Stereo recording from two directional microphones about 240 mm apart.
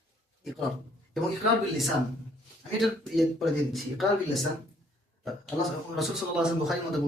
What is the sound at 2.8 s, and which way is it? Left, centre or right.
Speech, centre.